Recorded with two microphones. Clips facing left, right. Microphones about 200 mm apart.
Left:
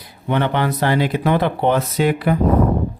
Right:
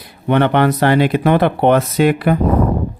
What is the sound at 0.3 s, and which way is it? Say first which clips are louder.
Speech: right 6 dB; 65° right (ahead or behind).